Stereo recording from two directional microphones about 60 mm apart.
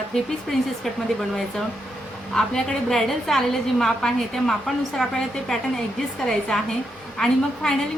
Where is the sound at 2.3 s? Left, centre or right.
Centre.